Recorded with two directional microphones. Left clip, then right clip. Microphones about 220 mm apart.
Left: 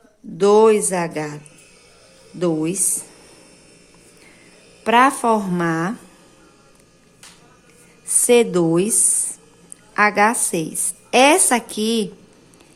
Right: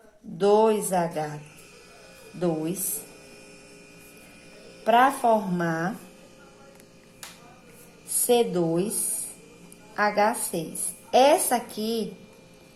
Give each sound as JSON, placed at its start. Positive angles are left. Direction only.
{"t": 0.3, "sound": "speech", "side_deg": 35}
{"t": 2.4, "sound": "speech", "side_deg": 30}
{"t": 4.8, "sound": "speech", "side_deg": 35}
{"t": 8.3, "sound": "speech", "side_deg": 35}
{"t": 9.9, "sound": "speech", "side_deg": 35}